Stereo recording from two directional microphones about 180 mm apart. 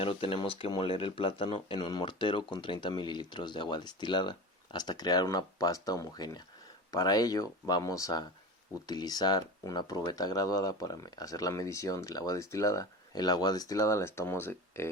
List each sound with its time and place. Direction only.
0.0 s speech: 30° left (ahead or behind); by 14.8 s 15° left (ahead or behind)